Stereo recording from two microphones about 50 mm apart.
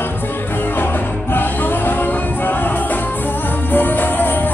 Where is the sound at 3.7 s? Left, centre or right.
Left.